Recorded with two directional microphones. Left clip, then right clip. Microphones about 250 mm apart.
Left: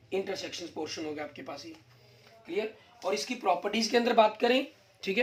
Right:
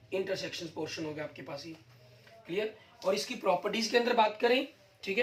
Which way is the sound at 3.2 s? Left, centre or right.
Left.